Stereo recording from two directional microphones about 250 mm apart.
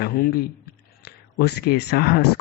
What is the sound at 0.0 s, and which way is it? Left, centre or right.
Speech, left.